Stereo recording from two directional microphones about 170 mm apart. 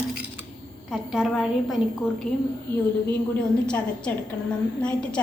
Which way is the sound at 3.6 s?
5° left (ahead or behind).